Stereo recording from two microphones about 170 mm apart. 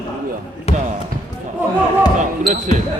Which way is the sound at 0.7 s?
40° left (ahead or behind).